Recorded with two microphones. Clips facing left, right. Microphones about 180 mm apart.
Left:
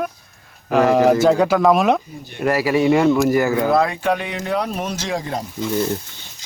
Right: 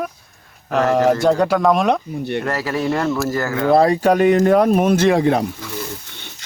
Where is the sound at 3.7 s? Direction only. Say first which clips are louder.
Right 4 dB; 35° right (ahead or behind); by 5.5 s 65° right (ahead or behind).